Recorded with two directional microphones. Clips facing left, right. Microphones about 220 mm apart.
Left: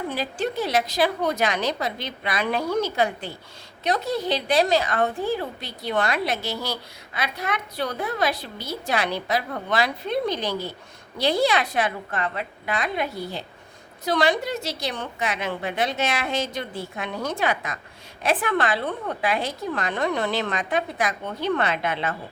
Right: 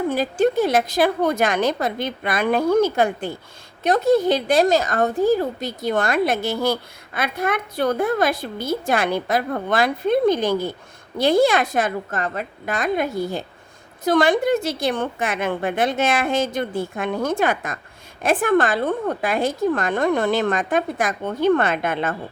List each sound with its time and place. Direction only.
0.1 s a woman's voice: 45° right (ahead or behind)